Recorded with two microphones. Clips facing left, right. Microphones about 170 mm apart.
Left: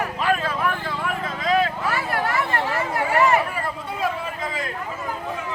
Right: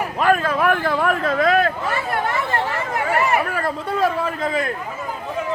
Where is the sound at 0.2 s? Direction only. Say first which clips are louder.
Right 7 dB; 50° right (ahead or behind).